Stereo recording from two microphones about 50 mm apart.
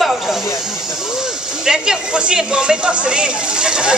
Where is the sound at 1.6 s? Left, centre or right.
Centre.